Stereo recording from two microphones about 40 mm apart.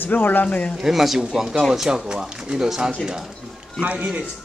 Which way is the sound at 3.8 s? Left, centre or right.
Right.